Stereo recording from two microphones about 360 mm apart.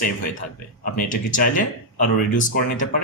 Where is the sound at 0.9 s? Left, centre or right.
Left.